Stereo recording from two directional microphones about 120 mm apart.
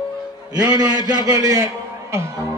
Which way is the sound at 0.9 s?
35° right (ahead or behind).